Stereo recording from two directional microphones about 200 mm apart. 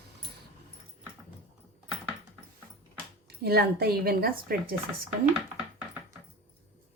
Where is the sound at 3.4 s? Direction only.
50° right (ahead or behind).